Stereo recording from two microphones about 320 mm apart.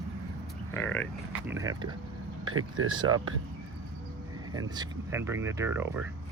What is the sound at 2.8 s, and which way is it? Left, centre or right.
Speech, right.